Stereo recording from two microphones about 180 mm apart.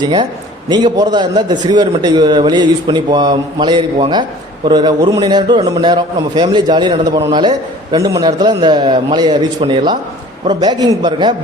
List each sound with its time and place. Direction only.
0.0 s speech: 25° right (ahead or behind)